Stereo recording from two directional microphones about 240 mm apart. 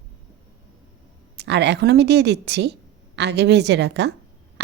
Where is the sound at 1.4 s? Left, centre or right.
Right.